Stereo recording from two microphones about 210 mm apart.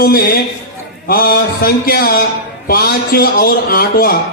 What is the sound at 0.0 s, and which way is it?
A man's voice, 45° left (ahead or behind).